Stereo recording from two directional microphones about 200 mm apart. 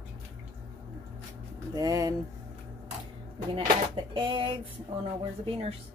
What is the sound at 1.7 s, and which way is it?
Speech, 20° right (ahead or behind).